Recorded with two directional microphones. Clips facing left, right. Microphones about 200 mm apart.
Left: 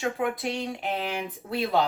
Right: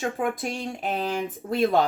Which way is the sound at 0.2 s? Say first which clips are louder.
Right 1 dB; 45° right (ahead or behind).